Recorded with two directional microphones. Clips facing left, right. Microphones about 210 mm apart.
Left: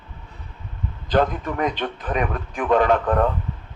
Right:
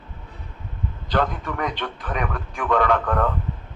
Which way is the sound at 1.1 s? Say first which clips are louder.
Left 4 dB; 20° left (ahead or behind).